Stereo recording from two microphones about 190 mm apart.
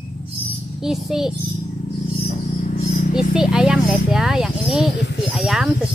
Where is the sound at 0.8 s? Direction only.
Centre (ahead or behind).